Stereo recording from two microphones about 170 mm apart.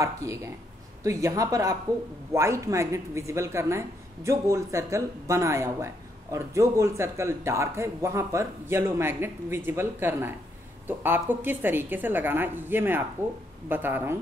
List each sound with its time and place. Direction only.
0.0 s a woman's voice: 20° right (ahead or behind)